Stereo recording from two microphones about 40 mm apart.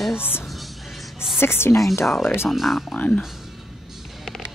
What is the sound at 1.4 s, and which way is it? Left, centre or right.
A woman's voice, left.